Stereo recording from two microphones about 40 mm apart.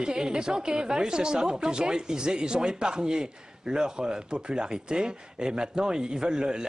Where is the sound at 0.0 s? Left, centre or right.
Right.